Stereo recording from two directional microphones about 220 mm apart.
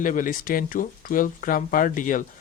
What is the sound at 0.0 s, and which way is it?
Speech, 40° left (ahead or behind).